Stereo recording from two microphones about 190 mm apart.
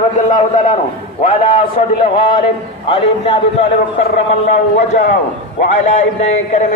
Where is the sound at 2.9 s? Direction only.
30° left (ahead or behind).